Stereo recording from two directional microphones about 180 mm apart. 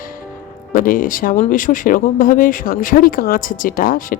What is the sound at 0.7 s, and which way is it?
Speech, 50° left (ahead or behind).